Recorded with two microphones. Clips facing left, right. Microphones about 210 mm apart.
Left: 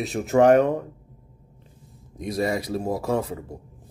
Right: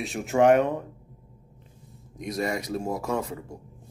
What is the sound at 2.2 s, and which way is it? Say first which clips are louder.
Speech: left 4 dB; 30° left (ahead or behind).